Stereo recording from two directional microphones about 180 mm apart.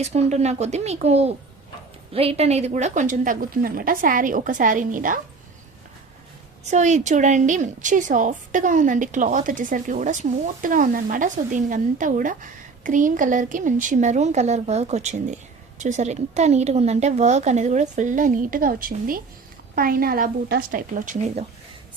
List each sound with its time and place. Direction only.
0.0 s a woman's voice: 35° right (ahead or behind)
6.7 s a woman's voice: 40° right (ahead or behind)